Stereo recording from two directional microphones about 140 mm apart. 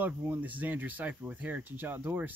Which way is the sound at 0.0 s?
15° right (ahead or behind).